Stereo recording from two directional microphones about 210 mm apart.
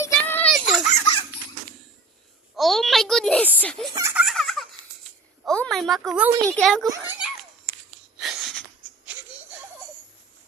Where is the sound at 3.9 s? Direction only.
15° right (ahead or behind).